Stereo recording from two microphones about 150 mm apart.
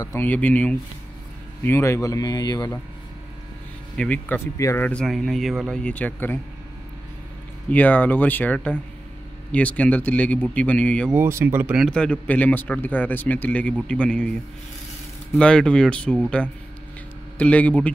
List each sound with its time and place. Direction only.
0.0 s speech: 15° left (ahead or behind)
3.9 s speech: 10° left (ahead or behind)
4.6 s speech: 20° left (ahead or behind)
4.8 s speech: 5° left (ahead or behind)
7.7 s speech: 10° left (ahead or behind)
11.1 s speech: 15° right (ahead or behind)
11.8 s speech: 5° left (ahead or behind)
15.3 s speech: 5° left (ahead or behind)